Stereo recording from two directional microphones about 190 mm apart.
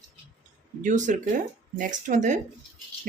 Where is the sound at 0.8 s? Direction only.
40° right (ahead or behind).